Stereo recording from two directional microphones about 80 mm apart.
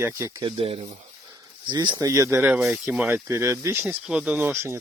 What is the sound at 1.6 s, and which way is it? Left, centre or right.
Speech, right.